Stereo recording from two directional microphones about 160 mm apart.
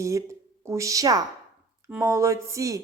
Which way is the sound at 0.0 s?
20° right (ahead or behind).